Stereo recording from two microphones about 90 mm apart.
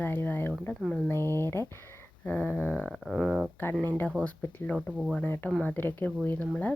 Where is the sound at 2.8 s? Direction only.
Centre (ahead or behind).